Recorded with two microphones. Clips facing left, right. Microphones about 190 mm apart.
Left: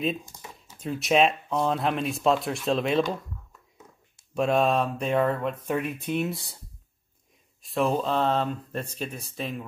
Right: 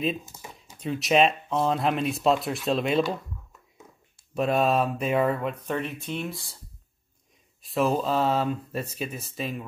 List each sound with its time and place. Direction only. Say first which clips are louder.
0.0 s a sound: even; 5° right (ahead or behind)
0.8 s speech: even; centre (ahead or behind)
4.3 s speech: even; centre (ahead or behind)
5.7 s speech: left 3 dB; 10° left (ahead or behind)
6.0 s speech: left 5 dB; 20° left (ahead or behind)
7.6 s speech: right 1 dB; centre (ahead or behind)